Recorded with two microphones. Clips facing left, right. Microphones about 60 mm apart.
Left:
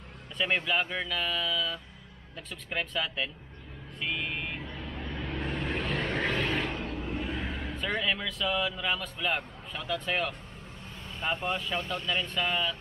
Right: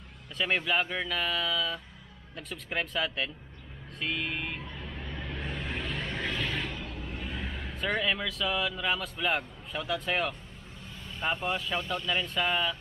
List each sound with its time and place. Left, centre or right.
0.4 s speech: centre
4.0 s vehicle: centre
5.1 s a sound: left
7.3 s speech: centre
11.4 s speech: centre